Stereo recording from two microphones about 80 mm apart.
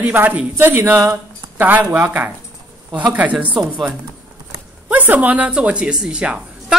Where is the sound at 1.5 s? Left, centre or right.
Right.